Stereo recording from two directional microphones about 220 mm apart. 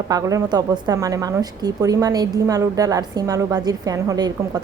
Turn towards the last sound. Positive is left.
turn(degrees=-15)  # may be behind; listen again after turning